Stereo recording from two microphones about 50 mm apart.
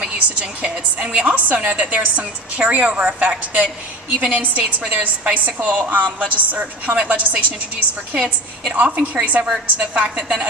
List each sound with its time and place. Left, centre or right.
0.0 s a woman's voice: right
8.7 s a woman's voice: right
10.2 s a woman's voice: centre